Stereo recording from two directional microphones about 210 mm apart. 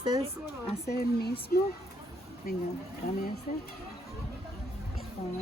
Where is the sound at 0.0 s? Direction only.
20° right (ahead or behind).